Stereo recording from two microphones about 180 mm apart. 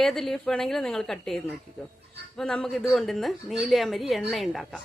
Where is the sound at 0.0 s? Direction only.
Centre (ahead or behind).